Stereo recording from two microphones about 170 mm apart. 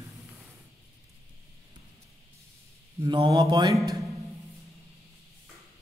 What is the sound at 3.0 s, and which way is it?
Mantra, 25° right (ahead or behind).